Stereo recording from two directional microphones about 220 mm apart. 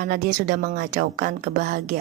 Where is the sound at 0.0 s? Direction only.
40° right (ahead or behind).